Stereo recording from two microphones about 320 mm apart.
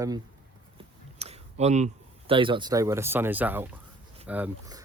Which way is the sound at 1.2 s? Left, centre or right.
Centre.